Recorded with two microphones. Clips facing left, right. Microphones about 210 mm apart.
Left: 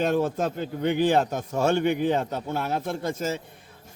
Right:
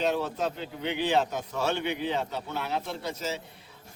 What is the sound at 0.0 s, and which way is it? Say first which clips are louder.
A man's voice: left 4 dB; 50° left (ahead or behind).